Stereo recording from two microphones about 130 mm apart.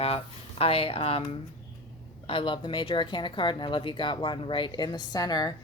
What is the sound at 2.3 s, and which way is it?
Speech, 40° left (ahead or behind).